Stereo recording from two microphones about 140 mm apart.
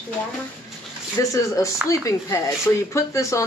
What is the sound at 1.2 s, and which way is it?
Speech, 20° left (ahead or behind).